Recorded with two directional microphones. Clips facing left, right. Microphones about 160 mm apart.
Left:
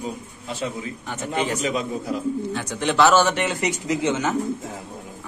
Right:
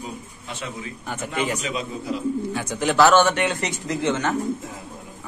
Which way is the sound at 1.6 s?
45° left (ahead or behind).